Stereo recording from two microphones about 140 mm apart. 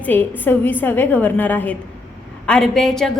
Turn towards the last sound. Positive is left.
turn(degrees=5)  # may be behind; listen again after turning